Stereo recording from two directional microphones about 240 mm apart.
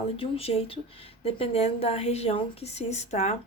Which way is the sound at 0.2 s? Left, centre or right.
Left.